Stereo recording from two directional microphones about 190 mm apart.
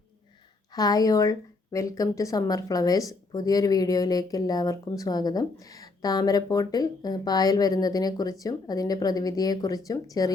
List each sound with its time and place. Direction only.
0.7 s speech: 20° left (ahead or behind)